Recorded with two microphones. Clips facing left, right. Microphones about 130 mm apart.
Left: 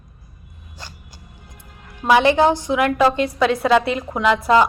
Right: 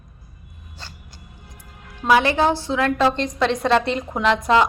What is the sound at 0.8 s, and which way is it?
Speech, 15° left (ahead or behind).